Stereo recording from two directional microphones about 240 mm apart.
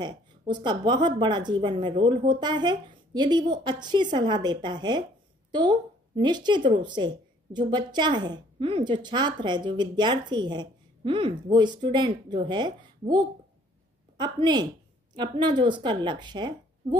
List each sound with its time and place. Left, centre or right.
0.0 s a woman's voice: centre
14.1 s a woman's voice: centre